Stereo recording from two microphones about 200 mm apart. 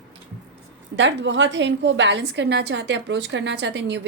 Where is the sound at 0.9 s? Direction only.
65° right (ahead or behind).